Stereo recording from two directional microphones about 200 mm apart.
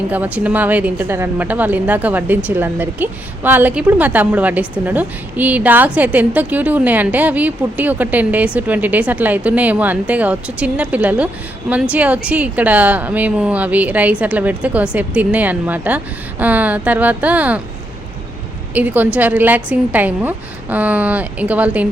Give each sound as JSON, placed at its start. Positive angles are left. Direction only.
{"t": 0.1, "sound": "a woman's voice", "side_deg": -5}
{"t": 18.7, "sound": "a woman's voice", "side_deg": -10}